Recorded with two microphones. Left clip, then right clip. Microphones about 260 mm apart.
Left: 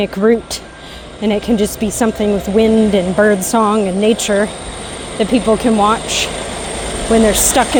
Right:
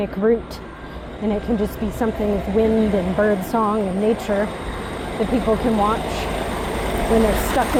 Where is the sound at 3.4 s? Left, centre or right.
Left.